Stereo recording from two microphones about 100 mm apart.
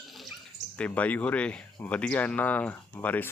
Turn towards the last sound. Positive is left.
turn(degrees=15)  # may be behind; listen again after turning